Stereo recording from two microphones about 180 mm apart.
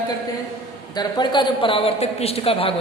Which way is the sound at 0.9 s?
25° left (ahead or behind).